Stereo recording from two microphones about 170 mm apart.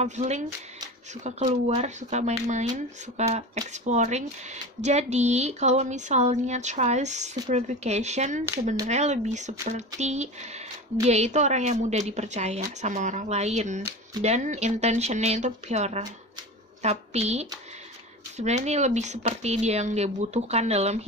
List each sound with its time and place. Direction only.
0.0 s speech: 45° right (ahead or behind)
1.8 s speech: 40° right (ahead or behind)